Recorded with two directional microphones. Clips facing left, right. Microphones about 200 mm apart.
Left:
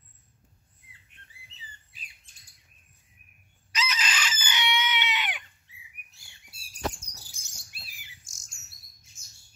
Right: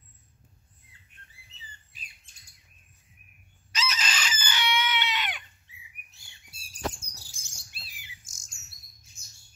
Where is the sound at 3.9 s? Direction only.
40° right (ahead or behind).